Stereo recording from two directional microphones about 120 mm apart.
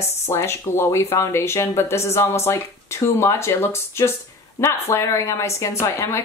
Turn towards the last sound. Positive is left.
turn(degrees=20)  # may be behind; listen again after turning